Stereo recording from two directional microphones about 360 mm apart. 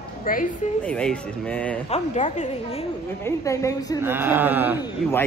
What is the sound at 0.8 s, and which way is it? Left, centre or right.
Speech, centre.